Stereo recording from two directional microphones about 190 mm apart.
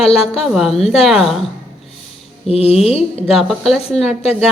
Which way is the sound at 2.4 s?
30° left (ahead or behind).